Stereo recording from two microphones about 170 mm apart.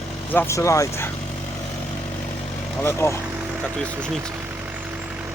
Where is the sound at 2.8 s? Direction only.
15° left (ahead or behind).